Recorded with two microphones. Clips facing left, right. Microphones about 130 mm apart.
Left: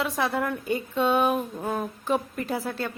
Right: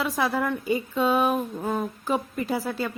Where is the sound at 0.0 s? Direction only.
Centre (ahead or behind).